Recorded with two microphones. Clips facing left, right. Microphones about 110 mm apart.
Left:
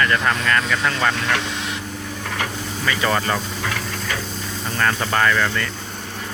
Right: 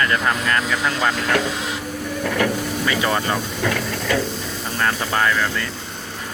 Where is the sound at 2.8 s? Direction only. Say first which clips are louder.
Left 1 dB; 20° right (ahead or behind).